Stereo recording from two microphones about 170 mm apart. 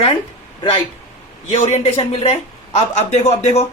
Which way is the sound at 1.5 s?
35° left (ahead or behind).